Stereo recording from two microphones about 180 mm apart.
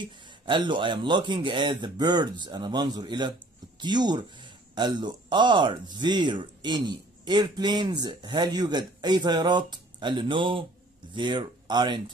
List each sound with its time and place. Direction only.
0.0 s speech: 25° right (ahead or behind)